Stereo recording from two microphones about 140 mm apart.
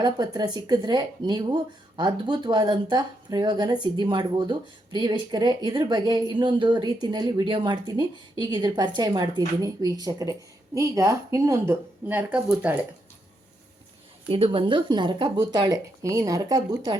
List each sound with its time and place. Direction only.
0.0 s speech: 30° right (ahead or behind); by 12.8 s 10° right (ahead or behind)
14.3 s speech: 40° right (ahead or behind)